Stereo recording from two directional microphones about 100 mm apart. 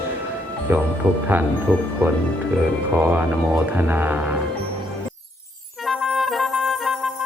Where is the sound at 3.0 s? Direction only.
20° right (ahead or behind).